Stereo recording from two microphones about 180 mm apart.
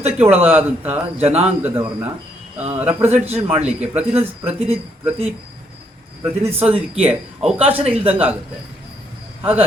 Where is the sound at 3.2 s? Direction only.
35° right (ahead or behind).